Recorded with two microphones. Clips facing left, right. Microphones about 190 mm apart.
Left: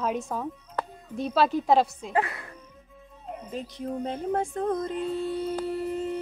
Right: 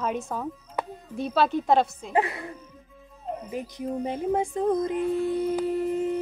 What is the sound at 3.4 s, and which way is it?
Music, 10° right (ahead or behind).